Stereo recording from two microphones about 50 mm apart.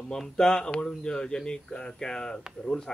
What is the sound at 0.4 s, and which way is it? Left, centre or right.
Speech, centre.